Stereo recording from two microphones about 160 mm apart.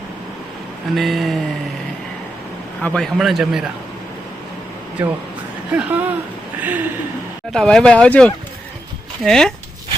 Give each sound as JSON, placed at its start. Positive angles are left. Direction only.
{"t": 0.9, "sound": "a man's voice", "side_deg": 0}
{"t": 2.8, "sound": "a man's voice", "side_deg": 5}
{"t": 5.0, "sound": "speech", "side_deg": -10}
{"t": 7.5, "sound": "a man's voice", "side_deg": 5}